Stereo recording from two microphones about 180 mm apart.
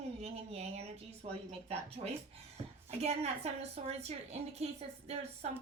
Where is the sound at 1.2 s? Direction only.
35° right (ahead or behind).